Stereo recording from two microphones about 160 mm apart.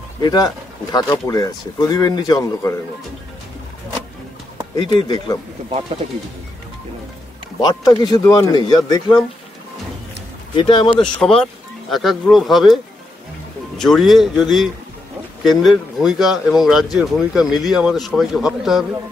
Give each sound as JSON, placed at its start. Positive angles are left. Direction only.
{"t": 0.2, "sound": "speech", "side_deg": 25}
{"t": 4.9, "sound": "speech", "side_deg": 25}
{"t": 7.6, "sound": "speech", "side_deg": 25}
{"t": 10.5, "sound": "speech", "side_deg": 30}
{"t": 11.1, "sound": "speech", "side_deg": 5}
{"t": 13.7, "sound": "speech", "side_deg": 0}